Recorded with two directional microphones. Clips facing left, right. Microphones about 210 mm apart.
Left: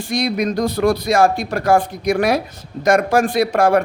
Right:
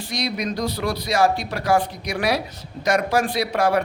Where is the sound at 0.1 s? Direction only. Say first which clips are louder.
Left 7 dB; 50° left (ahead or behind).